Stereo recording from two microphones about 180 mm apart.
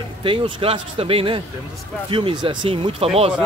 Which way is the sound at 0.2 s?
30° right (ahead or behind).